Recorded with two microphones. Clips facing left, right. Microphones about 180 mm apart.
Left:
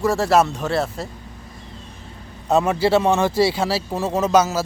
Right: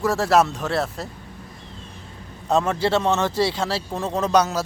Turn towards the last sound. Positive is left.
turn(degrees=5)  # may be behind; listen again after turning